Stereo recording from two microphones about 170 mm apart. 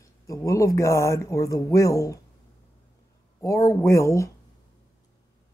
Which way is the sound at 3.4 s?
20° left (ahead or behind).